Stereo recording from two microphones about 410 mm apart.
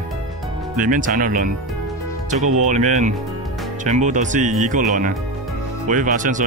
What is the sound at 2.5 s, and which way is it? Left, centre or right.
Speech, centre.